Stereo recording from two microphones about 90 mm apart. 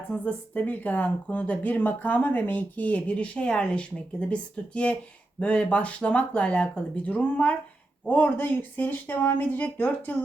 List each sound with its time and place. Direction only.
0.1 s speech: 15° left (ahead or behind)